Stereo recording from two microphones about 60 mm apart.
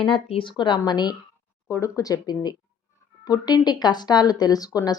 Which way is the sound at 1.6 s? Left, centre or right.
Left.